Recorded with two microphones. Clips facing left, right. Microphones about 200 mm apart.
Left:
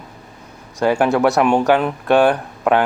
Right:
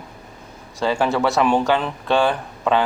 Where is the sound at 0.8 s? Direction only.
15° left (ahead or behind).